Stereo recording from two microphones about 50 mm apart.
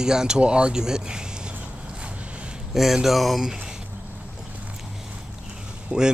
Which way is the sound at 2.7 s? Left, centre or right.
Centre.